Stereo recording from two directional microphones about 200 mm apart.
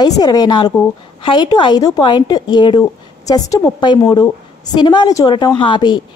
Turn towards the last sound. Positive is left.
turn(degrees=25)  # may be behind; listen again after turning